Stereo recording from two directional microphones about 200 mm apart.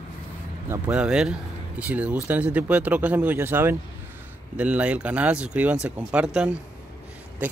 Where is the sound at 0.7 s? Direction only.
5° right (ahead or behind).